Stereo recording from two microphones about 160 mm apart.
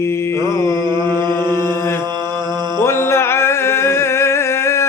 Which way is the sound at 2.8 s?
15° left (ahead or behind).